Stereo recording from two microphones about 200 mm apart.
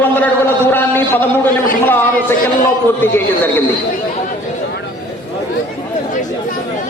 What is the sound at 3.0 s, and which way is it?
Speech, 10° left (ahead or behind).